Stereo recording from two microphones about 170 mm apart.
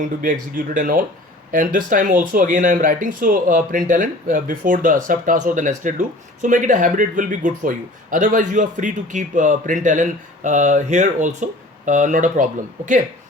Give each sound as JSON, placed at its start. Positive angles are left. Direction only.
{"t": 0.0, "sound": "speech", "side_deg": -50}